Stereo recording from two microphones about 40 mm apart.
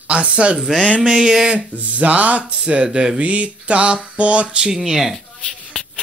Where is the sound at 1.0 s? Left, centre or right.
Centre.